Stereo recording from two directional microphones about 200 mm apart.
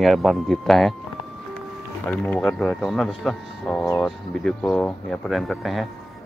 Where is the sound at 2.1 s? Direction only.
5° left (ahead or behind).